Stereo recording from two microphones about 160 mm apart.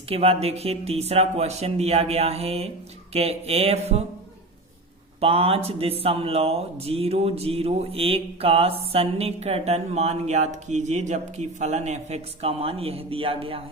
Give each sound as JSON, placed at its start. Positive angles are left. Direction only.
{"t": 0.1, "sound": "speech", "side_deg": -40}
{"t": 5.2, "sound": "speech", "side_deg": -35}